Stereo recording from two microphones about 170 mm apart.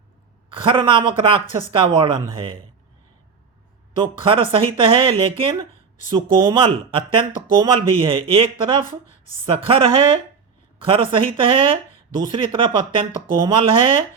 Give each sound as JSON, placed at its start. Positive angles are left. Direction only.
{"t": 0.5, "sound": "speech", "side_deg": -30}
{"t": 4.0, "sound": "speech", "side_deg": -30}